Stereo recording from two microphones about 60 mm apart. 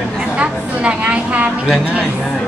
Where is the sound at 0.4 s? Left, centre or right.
Centre.